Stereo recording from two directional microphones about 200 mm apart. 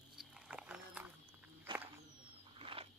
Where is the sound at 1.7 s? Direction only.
25° right (ahead or behind).